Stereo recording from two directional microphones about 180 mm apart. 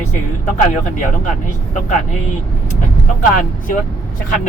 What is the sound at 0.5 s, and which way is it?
Speech, 45° left (ahead or behind).